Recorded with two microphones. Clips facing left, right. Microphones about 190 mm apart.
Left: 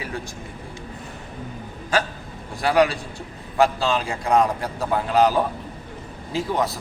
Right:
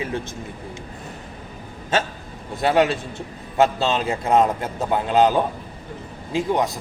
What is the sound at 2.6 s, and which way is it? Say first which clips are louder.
A man's voice: right 1 dB; 25° right (ahead or behind).